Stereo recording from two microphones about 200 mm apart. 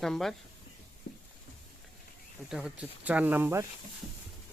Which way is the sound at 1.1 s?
55° left (ahead or behind).